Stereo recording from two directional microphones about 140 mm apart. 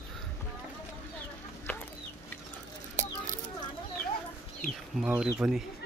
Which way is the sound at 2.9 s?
60° right (ahead or behind).